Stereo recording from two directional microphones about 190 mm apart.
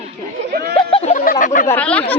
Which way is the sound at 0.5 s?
55° right (ahead or behind).